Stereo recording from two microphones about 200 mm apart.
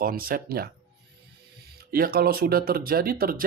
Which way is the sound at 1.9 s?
50° right (ahead or behind).